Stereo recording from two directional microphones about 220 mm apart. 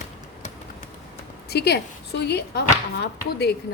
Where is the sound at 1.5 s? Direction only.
50° left (ahead or behind).